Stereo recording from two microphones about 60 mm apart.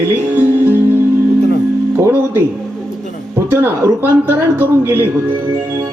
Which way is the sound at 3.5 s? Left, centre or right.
Right.